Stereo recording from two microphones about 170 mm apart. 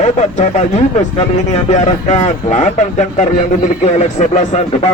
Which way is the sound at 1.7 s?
45° left (ahead or behind).